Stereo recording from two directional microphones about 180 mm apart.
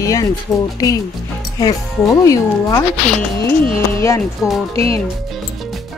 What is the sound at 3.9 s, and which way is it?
Speech, 15° left (ahead or behind).